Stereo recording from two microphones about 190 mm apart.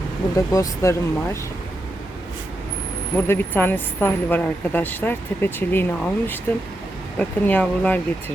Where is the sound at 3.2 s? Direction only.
10° left (ahead or behind).